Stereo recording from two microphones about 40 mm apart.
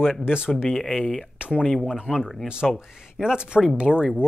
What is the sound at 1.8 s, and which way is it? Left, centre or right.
Speech, centre.